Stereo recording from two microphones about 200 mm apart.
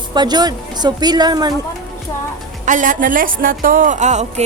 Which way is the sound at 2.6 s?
40° right (ahead or behind).